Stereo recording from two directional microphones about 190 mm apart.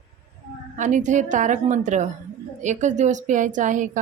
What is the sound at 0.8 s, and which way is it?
A woman's voice, 40° right (ahead or behind).